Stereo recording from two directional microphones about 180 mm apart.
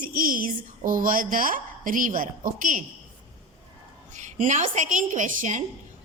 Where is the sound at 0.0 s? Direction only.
50° right (ahead or behind).